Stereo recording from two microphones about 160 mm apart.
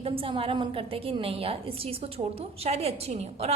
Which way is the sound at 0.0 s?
35° right (ahead or behind).